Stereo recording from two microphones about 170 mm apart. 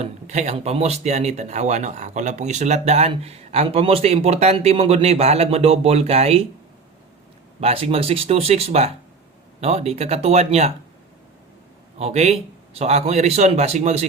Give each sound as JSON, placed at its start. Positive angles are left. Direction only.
{"t": 0.0, "sound": "speech", "side_deg": -40}
{"t": 7.6, "sound": "speech", "side_deg": -35}
{"t": 11.9, "sound": "speech", "side_deg": -40}